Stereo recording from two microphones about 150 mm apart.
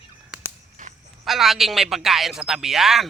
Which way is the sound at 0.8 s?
60° right (ahead or behind).